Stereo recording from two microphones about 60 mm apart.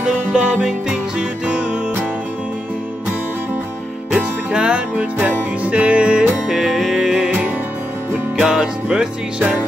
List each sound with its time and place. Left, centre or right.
0.0 s music: centre
4.1 s music: centre
6.5 s music: centre
7.2 s music: right
8.4 s music: centre